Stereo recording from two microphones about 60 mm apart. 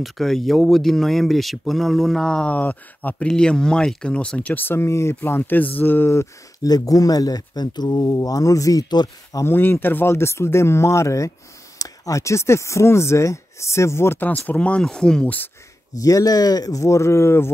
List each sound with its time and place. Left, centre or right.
0.0 s speech: centre
2.2 s speech: centre
2.5 s speech: left
3.3 s speech: centre
4.6 s speech: left
6.6 s speech: left
9.4 s speech: left
11.8 s speech: left
14.2 s speech: left
14.8 s speech: centre
15.2 s speech: left
16.0 s speech: left